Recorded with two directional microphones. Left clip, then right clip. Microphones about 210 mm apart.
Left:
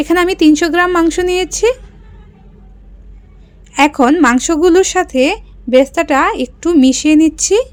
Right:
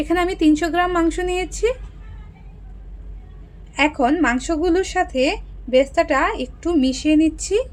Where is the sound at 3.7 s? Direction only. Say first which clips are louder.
Left 7 dB; 50° left (ahead or behind).